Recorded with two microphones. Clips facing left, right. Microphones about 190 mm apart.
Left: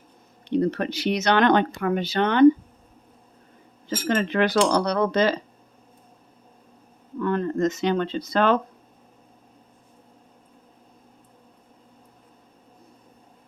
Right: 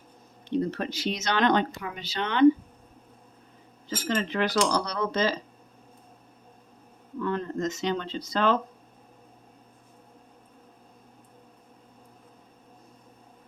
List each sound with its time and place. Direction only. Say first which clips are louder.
0.4 s speech: left 5 dB; 65° left (ahead or behind)
3.8 s speech: left 5 dB; 55° left (ahead or behind)
7.2 s speech: left 6 dB; 55° left (ahead or behind)